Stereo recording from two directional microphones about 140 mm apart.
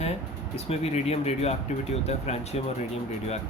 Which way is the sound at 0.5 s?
45° left (ahead or behind).